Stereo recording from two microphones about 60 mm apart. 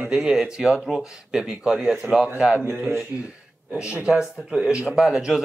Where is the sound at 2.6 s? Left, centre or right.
Right.